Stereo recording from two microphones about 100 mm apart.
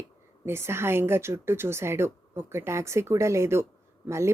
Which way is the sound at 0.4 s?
25° right (ahead or behind).